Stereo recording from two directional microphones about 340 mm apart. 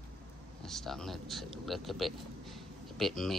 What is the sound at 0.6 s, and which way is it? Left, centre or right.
Speech, centre.